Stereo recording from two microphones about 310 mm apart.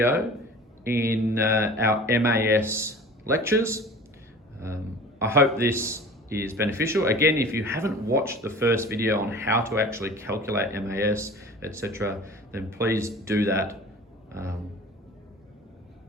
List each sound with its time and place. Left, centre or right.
0.9 s speech: centre
5.2 s speech: centre